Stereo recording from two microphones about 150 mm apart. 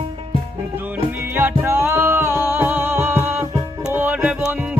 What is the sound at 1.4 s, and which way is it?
Music, 15° right (ahead or behind).